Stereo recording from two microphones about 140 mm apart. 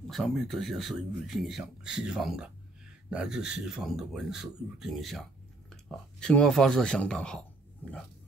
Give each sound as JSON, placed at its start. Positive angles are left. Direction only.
{"t": 0.0, "sound": "speech", "side_deg": 5}